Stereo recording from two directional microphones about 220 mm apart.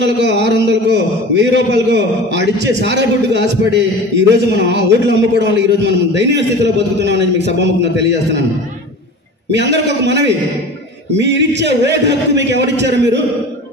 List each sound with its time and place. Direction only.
0.0 s a man's voice: 50° right (ahead or behind)
9.5 s a man's voice: 50° right (ahead or behind)